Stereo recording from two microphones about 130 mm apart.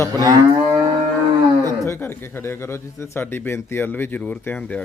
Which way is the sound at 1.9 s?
15° left (ahead or behind).